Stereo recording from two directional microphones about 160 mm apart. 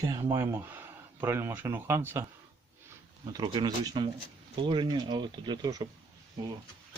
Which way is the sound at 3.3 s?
30° right (ahead or behind).